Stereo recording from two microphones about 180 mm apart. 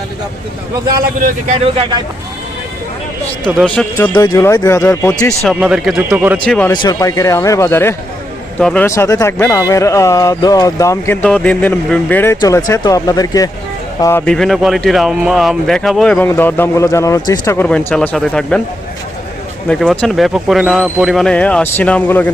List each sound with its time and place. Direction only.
1.5 s speech: 30° right (ahead or behind)
3.9 s speech: 15° left (ahead or behind)
5.5 s speech: 5° right (ahead or behind)
6.4 s speech: 5° left (ahead or behind)
6.7 s speech: 20° left (ahead or behind)
14.3 s speech: centre (ahead or behind)
19.6 s speech: centre (ahead or behind)